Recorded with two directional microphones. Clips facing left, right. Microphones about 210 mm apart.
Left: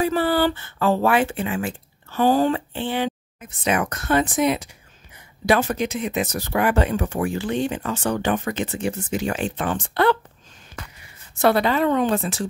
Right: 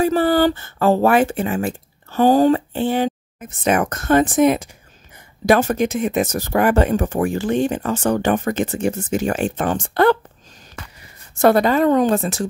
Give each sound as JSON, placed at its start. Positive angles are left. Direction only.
{"t": 0.0, "sound": "speech", "side_deg": -45}
{"t": 11.3, "sound": "speech", "side_deg": -45}